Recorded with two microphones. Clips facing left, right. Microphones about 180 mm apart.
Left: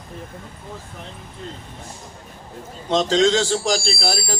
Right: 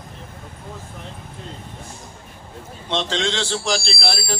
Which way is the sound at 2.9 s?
40° left (ahead or behind).